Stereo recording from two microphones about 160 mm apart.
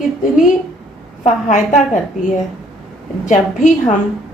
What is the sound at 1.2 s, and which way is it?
A woman's voice, 50° left (ahead or behind).